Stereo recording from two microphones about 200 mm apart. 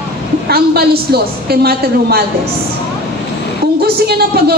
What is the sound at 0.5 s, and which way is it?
A woman's voice, 50° right (ahead or behind).